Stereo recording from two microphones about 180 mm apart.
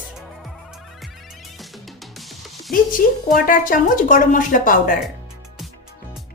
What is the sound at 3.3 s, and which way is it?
Speech, 50° left (ahead or behind).